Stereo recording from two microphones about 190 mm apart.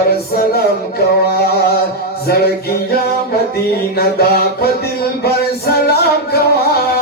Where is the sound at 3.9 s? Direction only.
55° left (ahead or behind).